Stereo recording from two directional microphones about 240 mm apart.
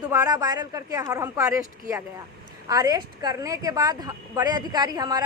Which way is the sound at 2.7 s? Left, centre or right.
Centre.